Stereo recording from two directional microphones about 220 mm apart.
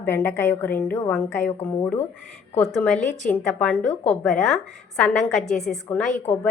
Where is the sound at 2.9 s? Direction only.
35° left (ahead or behind).